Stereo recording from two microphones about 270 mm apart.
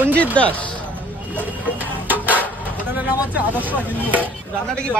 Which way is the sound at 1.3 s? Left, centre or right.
Centre.